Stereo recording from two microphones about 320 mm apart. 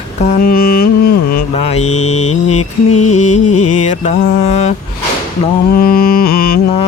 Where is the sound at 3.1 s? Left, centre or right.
Left.